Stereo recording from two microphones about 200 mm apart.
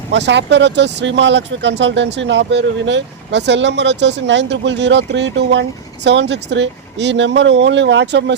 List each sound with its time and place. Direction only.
0.1 s speech: 60° right (ahead or behind)